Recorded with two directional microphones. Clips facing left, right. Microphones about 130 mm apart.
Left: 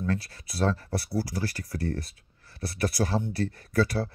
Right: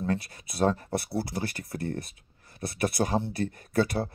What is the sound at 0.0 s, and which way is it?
Speech, 20° right (ahead or behind).